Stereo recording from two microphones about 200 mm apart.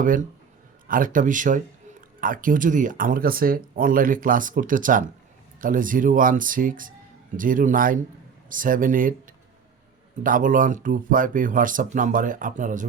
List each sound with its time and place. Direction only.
0.0 s speech: 40° right (ahead or behind)